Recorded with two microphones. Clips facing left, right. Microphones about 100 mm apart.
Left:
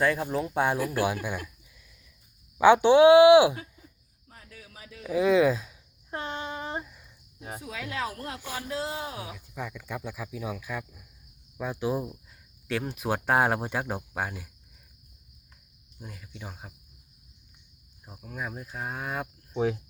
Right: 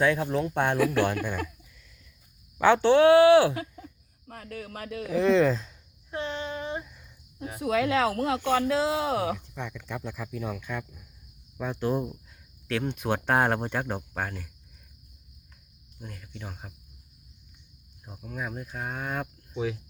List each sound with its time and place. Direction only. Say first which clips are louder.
0.0 s speech: right 2 dB; centre (ahead or behind)
0.8 s speech: right 5 dB; 90° right
1.0 s speech: right 1 dB; 10° left (ahead or behind)
2.6 s speech: left 2 dB; 15° left (ahead or behind)
3.5 s a sound: right 6 dB; 85° right; by 5.0 s 70° right (ahead or behind)
5.0 s speech: even; 5° left (ahead or behind)
6.1 s speech: right 2 dB; 40° left (ahead or behind)
6.8 s a sound: even; 5° left (ahead or behind)
7.6 s speech: right 11 dB; 85° right
9.6 s speech: even; 5° left (ahead or behind)
16.0 s speech: right 1 dB; 5° left (ahead or behind)
18.0 s speech: right 1 dB; centre (ahead or behind)
19.5 s speech: left 4 dB; 35° left (ahead or behind)